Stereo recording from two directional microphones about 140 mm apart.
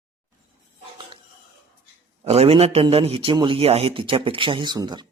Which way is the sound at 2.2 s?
45° right (ahead or behind).